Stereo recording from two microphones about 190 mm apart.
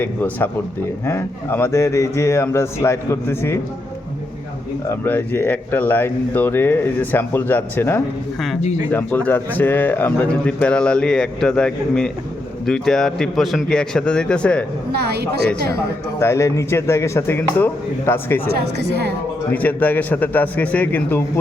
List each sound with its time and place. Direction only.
0.0 s speech: 10° left (ahead or behind)
4.9 s a man's voice: 10° left (ahead or behind)
14.9 s speech: 60° right (ahead or behind)
16.2 s speech: 15° left (ahead or behind)
18.5 s speech: 60° right (ahead or behind)
19.5 s speech: 10° left (ahead or behind)